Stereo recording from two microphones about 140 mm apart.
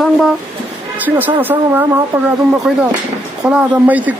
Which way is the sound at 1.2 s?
15° right (ahead or behind).